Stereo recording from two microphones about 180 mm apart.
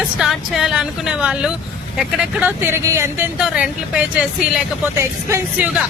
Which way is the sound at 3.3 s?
5° right (ahead or behind).